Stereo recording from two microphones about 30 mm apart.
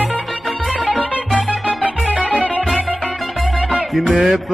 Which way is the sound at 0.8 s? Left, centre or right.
Left.